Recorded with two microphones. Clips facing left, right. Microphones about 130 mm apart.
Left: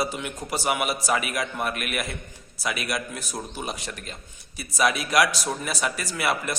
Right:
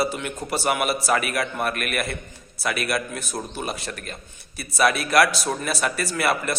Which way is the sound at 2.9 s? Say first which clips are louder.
Right 4 dB; 15° left (ahead or behind).